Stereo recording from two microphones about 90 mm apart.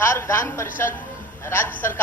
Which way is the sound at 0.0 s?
30° left (ahead or behind).